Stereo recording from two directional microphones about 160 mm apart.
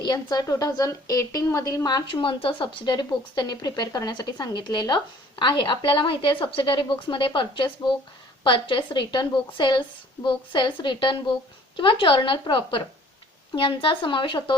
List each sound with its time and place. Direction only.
0.0 s a woman's voice: 25° left (ahead or behind)